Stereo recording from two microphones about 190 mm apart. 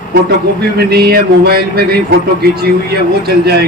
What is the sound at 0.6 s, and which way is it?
A man's voice, 55° right (ahead or behind).